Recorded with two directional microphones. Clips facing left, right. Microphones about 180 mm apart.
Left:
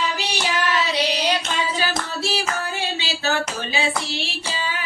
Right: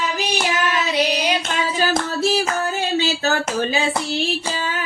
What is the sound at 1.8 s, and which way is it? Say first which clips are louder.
Hands: right 6 dB; 45° right (ahead or behind).